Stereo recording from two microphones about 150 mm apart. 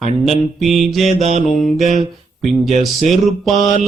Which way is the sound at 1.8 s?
55° right (ahead or behind).